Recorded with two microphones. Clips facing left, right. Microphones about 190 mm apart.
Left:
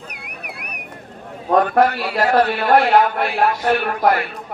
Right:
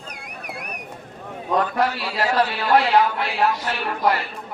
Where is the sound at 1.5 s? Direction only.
60° left (ahead or behind).